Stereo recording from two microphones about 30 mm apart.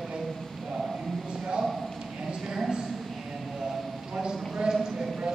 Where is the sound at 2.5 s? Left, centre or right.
Centre.